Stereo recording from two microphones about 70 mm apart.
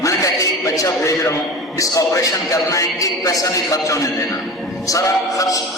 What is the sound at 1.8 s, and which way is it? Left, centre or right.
A man's voice, left.